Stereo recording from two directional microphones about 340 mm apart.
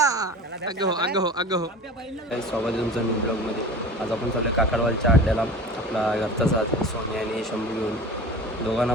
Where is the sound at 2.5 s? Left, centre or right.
Centre.